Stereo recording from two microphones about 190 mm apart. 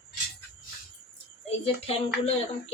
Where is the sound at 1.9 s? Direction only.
30° left (ahead or behind).